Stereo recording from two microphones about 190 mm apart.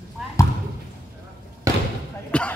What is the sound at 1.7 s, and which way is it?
Basketball bounce, 15° right (ahead or behind).